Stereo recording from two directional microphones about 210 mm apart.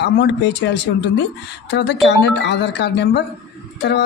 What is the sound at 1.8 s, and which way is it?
A woman's voice, 55° left (ahead or behind).